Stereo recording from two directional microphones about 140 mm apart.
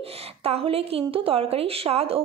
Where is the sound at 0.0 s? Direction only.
45° right (ahead or behind).